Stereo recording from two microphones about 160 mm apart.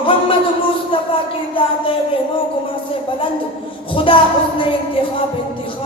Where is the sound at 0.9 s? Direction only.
35° left (ahead or behind).